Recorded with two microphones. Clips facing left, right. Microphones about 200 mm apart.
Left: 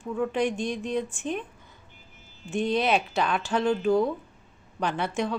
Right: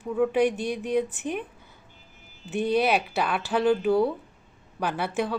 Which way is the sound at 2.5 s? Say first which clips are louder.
Right 1 dB; 5° right (ahead or behind).